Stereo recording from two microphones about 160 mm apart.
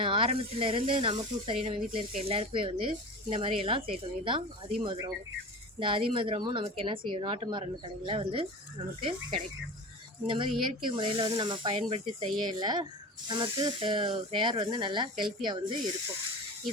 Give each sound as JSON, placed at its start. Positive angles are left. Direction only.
{"t": 0.0, "sound": "speech", "side_deg": -35}
{"t": 10.2, "sound": "speech", "side_deg": -30}